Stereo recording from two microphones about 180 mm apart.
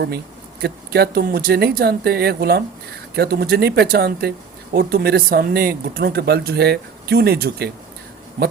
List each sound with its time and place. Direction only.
0.6 s speech: 60° right (ahead or behind)